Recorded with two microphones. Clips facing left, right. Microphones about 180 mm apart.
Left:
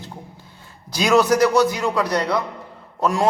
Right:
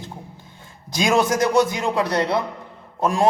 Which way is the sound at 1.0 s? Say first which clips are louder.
Left 3 dB; 25° right (ahead or behind).